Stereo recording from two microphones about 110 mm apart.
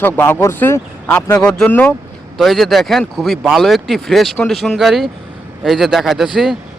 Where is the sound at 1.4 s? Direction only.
5° left (ahead or behind).